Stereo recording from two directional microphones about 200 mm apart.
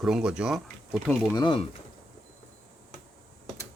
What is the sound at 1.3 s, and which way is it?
Speech, 25° left (ahead or behind).